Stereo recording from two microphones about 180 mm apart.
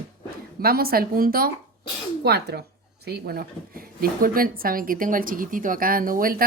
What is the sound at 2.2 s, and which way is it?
Speech, 65° right (ahead or behind).